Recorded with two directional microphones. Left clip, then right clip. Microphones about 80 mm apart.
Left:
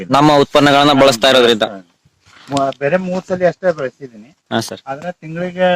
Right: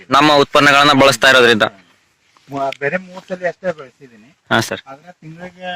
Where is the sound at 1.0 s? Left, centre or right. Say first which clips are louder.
Even; left.